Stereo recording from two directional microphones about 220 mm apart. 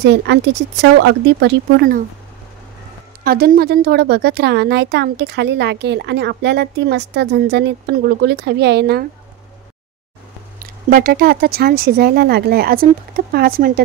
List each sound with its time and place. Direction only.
0.0 s a woman's voice: 50° right (ahead or behind)
3.3 s a woman's voice: 45° right (ahead or behind)
10.9 s a woman's voice: 40° right (ahead or behind)